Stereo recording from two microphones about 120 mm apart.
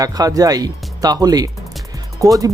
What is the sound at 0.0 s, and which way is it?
Speech, 30° right (ahead or behind).